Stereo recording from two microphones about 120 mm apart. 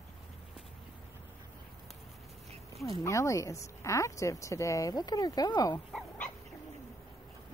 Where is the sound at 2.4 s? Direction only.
60° right (ahead or behind).